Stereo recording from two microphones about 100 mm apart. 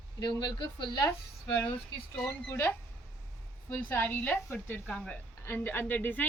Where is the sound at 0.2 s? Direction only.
45° left (ahead or behind).